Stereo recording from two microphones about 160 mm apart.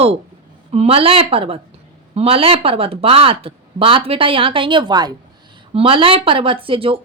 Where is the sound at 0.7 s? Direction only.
35° right (ahead or behind).